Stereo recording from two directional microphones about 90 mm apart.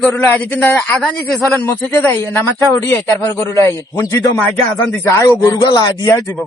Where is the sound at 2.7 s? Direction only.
30° left (ahead or behind).